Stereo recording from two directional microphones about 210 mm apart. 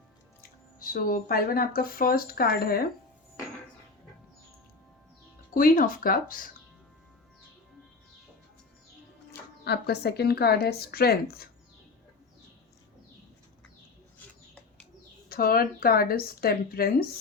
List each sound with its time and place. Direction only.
0.8 s speech: 45° left (ahead or behind)
5.5 s speech: 40° left (ahead or behind)
9.6 s speech: 50° left (ahead or behind)
15.3 s speech: 45° left (ahead or behind)